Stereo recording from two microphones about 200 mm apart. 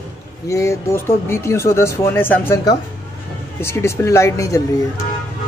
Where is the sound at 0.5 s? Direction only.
15° left (ahead or behind).